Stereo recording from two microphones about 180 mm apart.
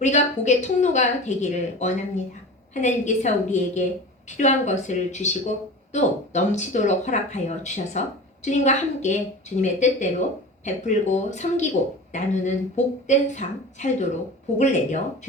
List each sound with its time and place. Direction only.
0.0 s speech: 40° left (ahead or behind)